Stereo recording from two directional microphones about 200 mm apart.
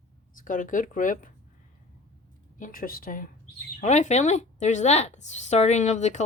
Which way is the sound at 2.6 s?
45° left (ahead or behind).